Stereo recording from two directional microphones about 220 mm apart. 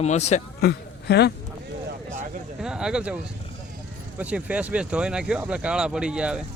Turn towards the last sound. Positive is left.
turn(degrees=-5)  # may be behind; listen again after turning